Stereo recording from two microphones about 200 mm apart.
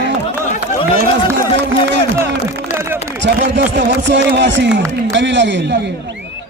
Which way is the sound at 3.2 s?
60° right (ahead or behind).